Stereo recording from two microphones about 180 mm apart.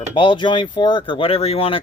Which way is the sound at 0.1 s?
30° left (ahead or behind).